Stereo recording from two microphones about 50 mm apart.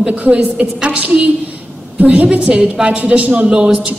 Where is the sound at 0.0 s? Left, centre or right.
Right.